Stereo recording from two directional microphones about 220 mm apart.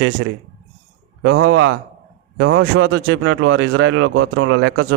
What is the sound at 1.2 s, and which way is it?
Speech, 65° right (ahead or behind).